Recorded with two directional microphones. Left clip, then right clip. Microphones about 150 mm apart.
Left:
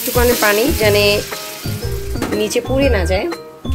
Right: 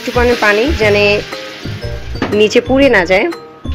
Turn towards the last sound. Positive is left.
turn(degrees=-25)  # may be behind; listen again after turning